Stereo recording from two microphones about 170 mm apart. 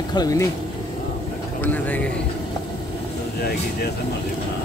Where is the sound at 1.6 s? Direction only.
10° left (ahead or behind).